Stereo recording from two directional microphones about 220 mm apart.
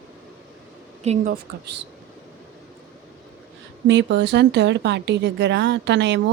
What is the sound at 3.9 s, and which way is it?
A woman's voice, 55° right (ahead or behind).